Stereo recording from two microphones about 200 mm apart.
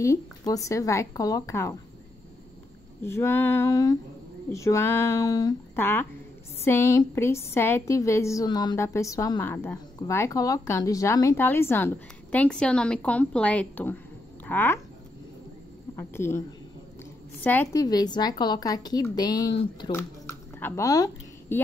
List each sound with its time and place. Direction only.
0.5 s a woman's voice: 15° left (ahead or behind)
3.0 s a woman's voice: 10° left (ahead or behind)
16.0 s a woman's voice: 10° left (ahead or behind)
17.4 s a woman's voice: 10° left (ahead or behind)